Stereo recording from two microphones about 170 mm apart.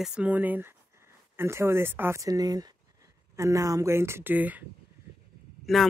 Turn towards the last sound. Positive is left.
turn(degrees=0)  # may be behind; listen again after turning